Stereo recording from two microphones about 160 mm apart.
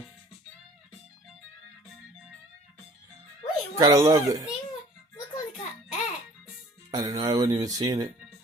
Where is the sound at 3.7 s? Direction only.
20° right (ahead or behind).